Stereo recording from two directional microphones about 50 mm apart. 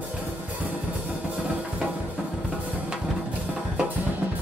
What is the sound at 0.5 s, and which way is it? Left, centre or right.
Music, right.